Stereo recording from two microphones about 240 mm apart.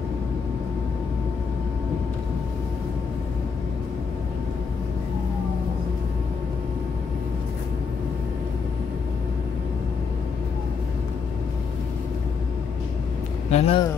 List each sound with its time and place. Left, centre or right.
13.5 s speech: left